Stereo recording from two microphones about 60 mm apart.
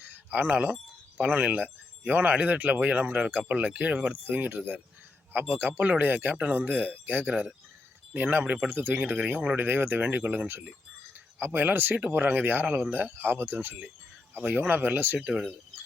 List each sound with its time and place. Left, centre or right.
0.3 s speech: right
9.0 s speech: right
9.6 s speech: right
11.9 s speech: right
14.3 s speech: right
15.2 s speech: centre